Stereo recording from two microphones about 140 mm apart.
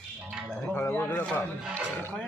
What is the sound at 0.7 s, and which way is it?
Speech, 15° left (ahead or behind).